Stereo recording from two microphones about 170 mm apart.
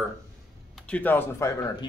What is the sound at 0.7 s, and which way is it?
Speech, 5° left (ahead or behind).